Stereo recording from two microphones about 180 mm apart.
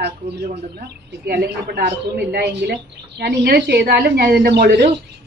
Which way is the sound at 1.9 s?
70° right (ahead or behind).